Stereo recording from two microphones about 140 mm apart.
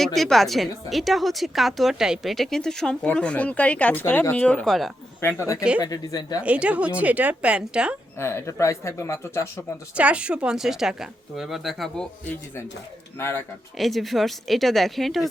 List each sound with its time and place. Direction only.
0.0 s a woman's voice: centre (ahead or behind)
5.4 s speech: 20° left (ahead or behind)
6.4 s speech: 10° right (ahead or behind)
8.2 s speech: 20° left (ahead or behind)
9.9 s a woman's voice: 10° right (ahead or behind)
13.1 s speech: 20° left (ahead or behind)
13.7 s a woman's voice: centre (ahead or behind)